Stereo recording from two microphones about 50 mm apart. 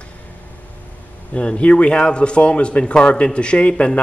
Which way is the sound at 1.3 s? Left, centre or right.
Left.